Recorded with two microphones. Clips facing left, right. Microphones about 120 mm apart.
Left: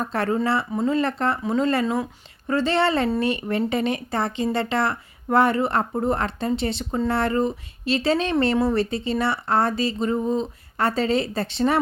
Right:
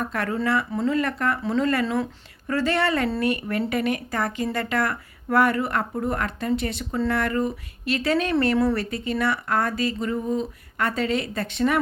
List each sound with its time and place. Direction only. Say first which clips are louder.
0.0 s speech: left 3 dB; 30° left (ahead or behind)